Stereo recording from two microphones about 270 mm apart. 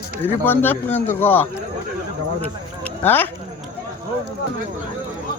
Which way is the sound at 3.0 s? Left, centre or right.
Centre.